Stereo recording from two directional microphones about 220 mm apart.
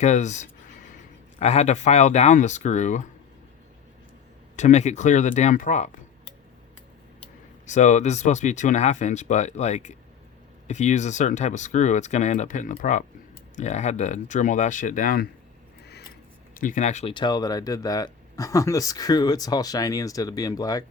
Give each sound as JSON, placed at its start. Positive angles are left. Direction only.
{"t": 0.0, "sound": "speech", "side_deg": 30}
{"t": 4.5, "sound": "speech", "side_deg": 30}
{"t": 7.7, "sound": "speech", "side_deg": 35}
{"t": 16.6, "sound": "speech", "side_deg": 35}